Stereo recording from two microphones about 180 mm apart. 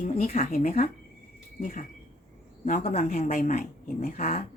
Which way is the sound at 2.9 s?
40° left (ahead or behind).